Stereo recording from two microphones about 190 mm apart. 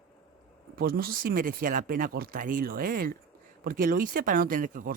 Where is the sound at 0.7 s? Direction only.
50° right (ahead or behind).